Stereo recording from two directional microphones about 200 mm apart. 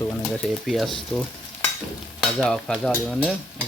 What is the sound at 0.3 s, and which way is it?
Stir, centre (ahead or behind).